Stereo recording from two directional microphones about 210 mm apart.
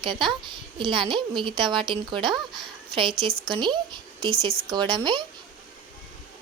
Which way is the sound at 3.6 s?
20° right (ahead or behind).